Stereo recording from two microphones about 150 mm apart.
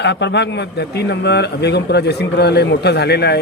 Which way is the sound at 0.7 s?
90° left.